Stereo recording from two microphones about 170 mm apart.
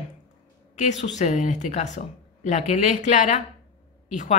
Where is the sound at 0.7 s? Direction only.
45° left (ahead or behind).